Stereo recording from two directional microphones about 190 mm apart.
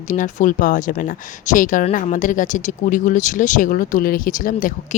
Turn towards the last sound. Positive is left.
turn(degrees=45)  # may be behind; listen again after turning